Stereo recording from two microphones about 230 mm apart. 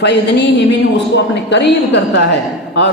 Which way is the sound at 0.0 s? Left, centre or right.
Left.